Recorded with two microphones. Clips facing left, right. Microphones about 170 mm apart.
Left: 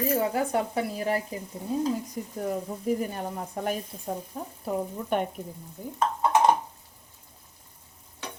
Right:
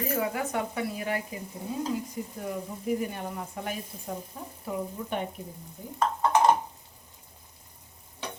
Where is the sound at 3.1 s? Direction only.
35° left (ahead or behind).